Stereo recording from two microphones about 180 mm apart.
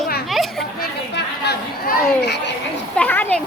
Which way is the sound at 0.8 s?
65° left (ahead or behind).